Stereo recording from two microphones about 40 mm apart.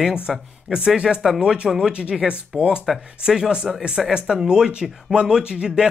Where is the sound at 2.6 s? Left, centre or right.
Right.